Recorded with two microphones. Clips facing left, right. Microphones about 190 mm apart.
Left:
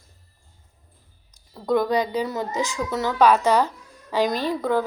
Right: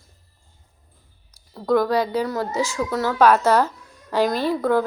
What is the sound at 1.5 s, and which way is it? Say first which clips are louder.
Speech: right 2 dB; centre (ahead or behind).